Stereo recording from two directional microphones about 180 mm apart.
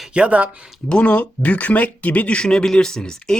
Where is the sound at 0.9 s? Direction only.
5° left (ahead or behind).